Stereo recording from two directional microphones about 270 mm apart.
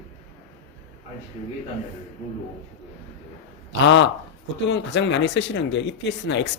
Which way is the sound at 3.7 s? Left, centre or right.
Left.